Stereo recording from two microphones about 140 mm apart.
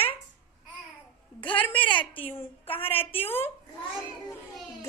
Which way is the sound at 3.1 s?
40° left (ahead or behind).